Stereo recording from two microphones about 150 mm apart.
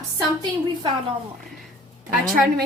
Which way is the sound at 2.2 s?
60° right (ahead or behind).